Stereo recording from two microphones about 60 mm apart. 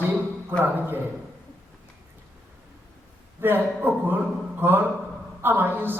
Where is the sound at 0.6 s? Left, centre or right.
Right.